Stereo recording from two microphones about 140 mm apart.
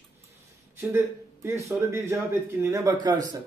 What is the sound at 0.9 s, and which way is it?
A man's voice, 20° right (ahead or behind).